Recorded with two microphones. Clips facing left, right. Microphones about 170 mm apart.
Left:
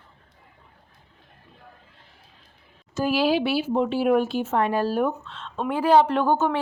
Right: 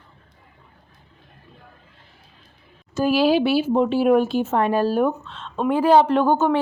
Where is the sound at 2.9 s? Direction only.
30° right (ahead or behind).